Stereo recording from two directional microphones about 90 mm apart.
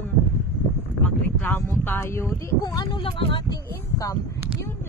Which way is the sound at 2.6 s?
45° left (ahead or behind).